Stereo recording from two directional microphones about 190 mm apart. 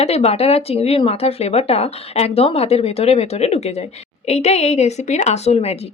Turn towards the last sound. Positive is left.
turn(degrees=35)  # may be behind; listen again after turning